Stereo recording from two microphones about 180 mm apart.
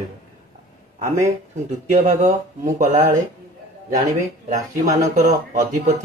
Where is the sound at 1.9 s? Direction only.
45° right (ahead or behind).